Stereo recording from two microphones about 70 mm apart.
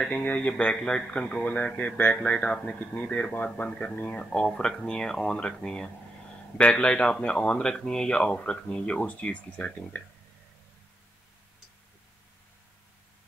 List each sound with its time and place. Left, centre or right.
0.1 s speech: left